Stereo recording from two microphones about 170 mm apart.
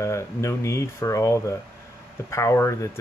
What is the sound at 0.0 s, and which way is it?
Speech, 15° left (ahead or behind).